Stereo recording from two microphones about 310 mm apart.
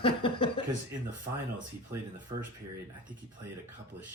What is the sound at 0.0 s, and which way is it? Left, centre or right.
Chuckle, centre.